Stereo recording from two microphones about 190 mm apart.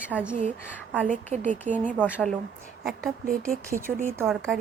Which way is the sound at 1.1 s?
40° right (ahead or behind).